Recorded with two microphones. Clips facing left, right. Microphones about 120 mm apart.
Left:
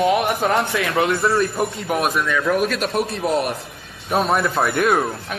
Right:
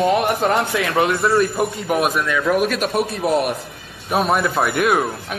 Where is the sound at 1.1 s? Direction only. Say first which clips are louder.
Right 2 dB; centre (ahead or behind).